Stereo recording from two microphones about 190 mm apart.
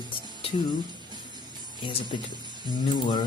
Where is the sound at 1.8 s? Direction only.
25° left (ahead or behind).